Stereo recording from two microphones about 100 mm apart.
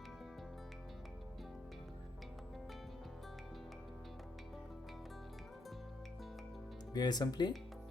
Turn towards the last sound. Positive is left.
turn(degrees=45)  # may be behind; listen again after turning